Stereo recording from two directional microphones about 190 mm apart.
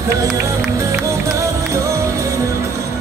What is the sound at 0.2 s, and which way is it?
Music, 15° right (ahead or behind).